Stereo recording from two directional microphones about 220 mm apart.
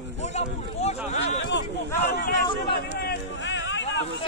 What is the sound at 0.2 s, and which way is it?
Speech, 30° left (ahead or behind).